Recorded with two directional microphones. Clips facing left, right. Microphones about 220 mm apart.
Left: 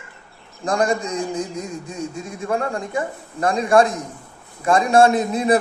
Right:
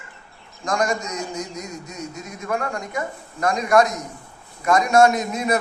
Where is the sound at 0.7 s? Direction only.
35° left (ahead or behind).